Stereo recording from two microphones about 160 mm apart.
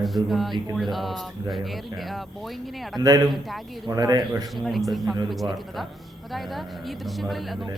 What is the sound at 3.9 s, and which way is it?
Speech, 25° right (ahead or behind).